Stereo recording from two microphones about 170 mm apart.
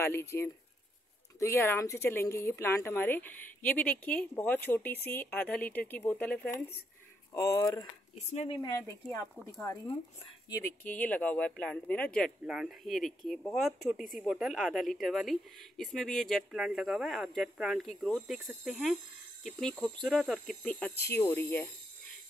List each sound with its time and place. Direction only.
0.0 s a woman's voice: 15° left (ahead or behind)
7.3 s speech: 20° left (ahead or behind)
8.3 s speech: 40° left (ahead or behind)
8.5 s a woman's voice: 20° left (ahead or behind); by 20.9 s centre (ahead or behind)
21.0 s a woman's voice: 15° left (ahead or behind)